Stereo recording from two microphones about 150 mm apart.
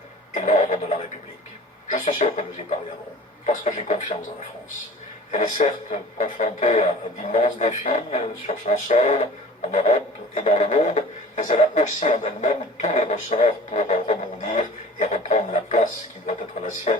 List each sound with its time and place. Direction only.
0.3 s a sound: 50° left (ahead or behind)
1.9 s a man's voice: 55° left (ahead or behind)
5.3 s a man's voice: 55° left (ahead or behind)